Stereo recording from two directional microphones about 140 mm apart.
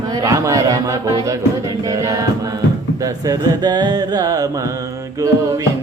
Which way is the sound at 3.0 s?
25° right (ahead or behind).